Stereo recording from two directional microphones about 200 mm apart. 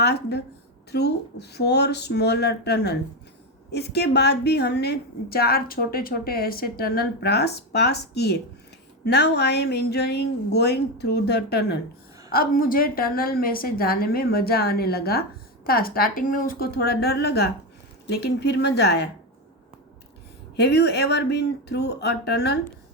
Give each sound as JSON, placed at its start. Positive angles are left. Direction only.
{"t": 0.0, "sound": "a woman's voice", "side_deg": 55}
{"t": 20.6, "sound": "a woman's voice", "side_deg": 55}